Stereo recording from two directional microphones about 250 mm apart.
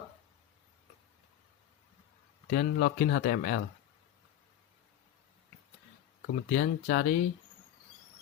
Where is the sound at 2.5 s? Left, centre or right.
Left.